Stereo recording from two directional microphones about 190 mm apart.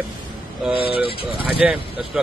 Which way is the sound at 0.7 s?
30° left (ahead or behind).